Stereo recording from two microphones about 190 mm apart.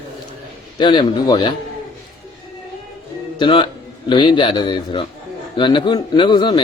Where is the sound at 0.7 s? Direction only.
25° left (ahead or behind).